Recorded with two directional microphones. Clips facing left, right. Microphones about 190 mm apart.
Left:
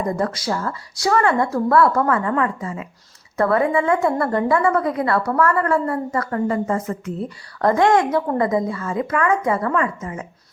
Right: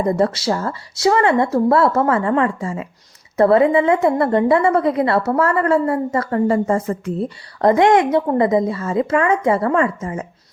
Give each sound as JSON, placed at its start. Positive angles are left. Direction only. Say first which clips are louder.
{"t": 0.0, "sound": "a woman's voice", "louder": "right 5 dB", "side_deg": -25}
{"t": 7.6, "sound": "a woman's voice", "louder": "right 3 dB", "side_deg": -20}